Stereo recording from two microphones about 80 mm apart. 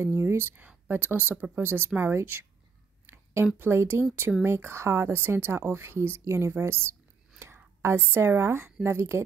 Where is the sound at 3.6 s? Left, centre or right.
Right.